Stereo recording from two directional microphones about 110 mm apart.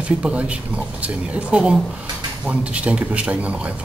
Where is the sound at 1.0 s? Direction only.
10° right (ahead or behind).